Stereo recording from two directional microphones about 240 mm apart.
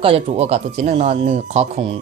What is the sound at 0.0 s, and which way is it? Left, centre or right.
Speech, right.